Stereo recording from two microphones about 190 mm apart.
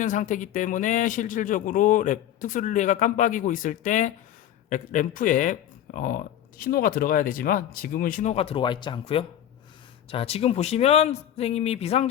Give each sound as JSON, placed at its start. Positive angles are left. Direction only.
{"t": 0.0, "sound": "speech", "side_deg": 40}